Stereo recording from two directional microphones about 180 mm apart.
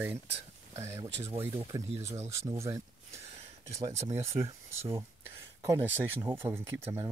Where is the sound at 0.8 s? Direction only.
15° right (ahead or behind).